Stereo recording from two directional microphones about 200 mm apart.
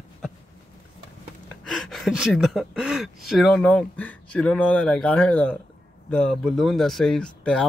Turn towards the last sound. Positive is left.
turn(degrees=5)  # may be behind; listen again after turning